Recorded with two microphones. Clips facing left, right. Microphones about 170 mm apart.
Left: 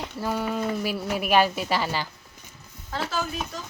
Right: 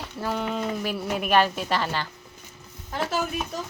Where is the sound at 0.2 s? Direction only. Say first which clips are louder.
Even; 5° left (ahead or behind).